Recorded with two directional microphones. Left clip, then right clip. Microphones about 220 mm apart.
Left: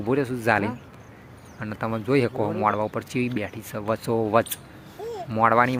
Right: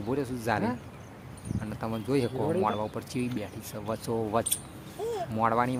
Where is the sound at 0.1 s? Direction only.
20° left (ahead or behind).